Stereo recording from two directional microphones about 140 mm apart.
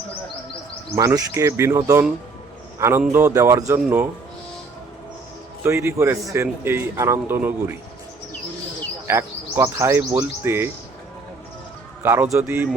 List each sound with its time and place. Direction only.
0.9 s a man's voice: 20° right (ahead or behind)
5.6 s a man's voice: 20° right (ahead or behind)
9.0 s a man's voice: 20° right (ahead or behind)
12.0 s a man's voice: 15° right (ahead or behind)